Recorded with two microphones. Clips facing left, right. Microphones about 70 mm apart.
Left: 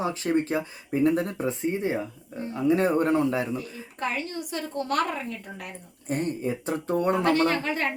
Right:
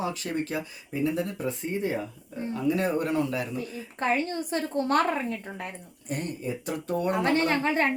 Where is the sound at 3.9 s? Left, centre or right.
Right.